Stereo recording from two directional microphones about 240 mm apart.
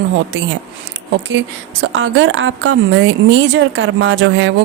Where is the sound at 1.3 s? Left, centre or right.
Right.